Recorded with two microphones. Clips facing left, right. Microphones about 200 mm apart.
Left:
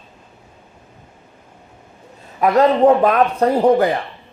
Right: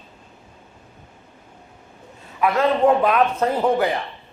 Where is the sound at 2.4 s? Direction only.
40° left (ahead or behind).